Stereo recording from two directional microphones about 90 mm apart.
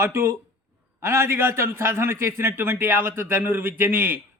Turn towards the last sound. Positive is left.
turn(degrees=-25)  # may be behind; listen again after turning